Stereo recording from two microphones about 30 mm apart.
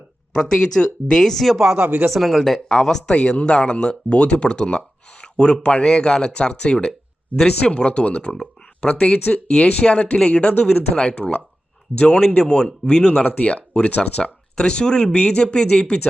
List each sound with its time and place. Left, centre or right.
0.3 s speech: left; by 2.6 s centre
2.6 s speech: centre
3.1 s speech: left
5.2 s a sound: left
5.6 s speech: left
13.2 s speech: left
13.7 s speech: left